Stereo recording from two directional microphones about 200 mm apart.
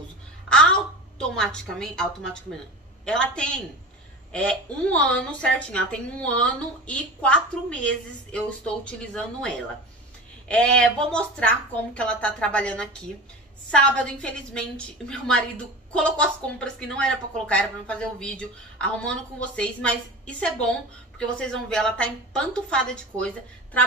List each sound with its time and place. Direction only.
1.1 s a woman's voice: 5° left (ahead or behind)
3.1 s a woman's voice: 5° left (ahead or behind)